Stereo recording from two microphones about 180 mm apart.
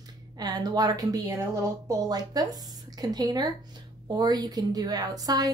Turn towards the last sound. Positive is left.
turn(degrees=-20)  # may be behind; listen again after turning